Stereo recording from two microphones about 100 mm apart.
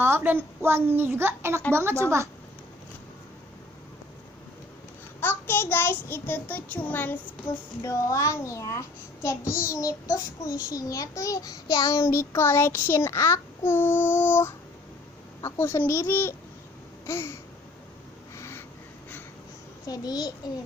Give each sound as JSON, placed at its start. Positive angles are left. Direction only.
{"t": 0.0, "sound": "a child's voice", "side_deg": -20}
{"t": 5.2, "sound": "a child's voice", "side_deg": 20}
{"t": 7.8, "sound": "a child's voice", "side_deg": 30}
{"t": 18.3, "sound": "a sound", "side_deg": 25}
{"t": 19.9, "sound": "a child's voice", "side_deg": 40}